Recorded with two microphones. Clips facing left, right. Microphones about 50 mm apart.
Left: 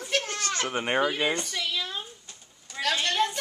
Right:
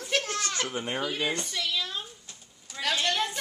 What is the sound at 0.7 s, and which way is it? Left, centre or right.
Speech, left.